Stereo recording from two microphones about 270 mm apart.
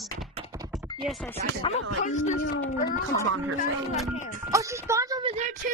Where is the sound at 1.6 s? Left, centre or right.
Left.